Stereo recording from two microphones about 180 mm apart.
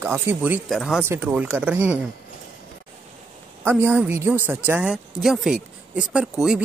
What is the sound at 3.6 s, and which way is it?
Speech, 10° right (ahead or behind).